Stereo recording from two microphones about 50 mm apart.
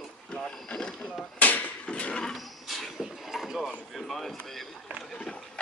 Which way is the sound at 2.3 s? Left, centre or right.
Centre.